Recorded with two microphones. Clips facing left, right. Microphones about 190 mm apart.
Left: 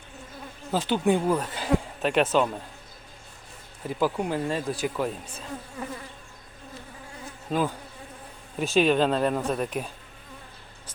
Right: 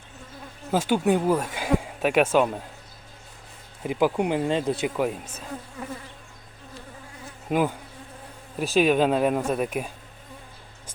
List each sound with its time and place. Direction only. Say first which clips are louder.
0.7 s speech: right 2 dB; 10° right (ahead or behind)
3.8 s speech: right 3 dB; 15° right (ahead or behind)
7.5 s speech: right 3 dB; 15° right (ahead or behind)
8.5 s speech: right 1 dB; 5° right (ahead or behind)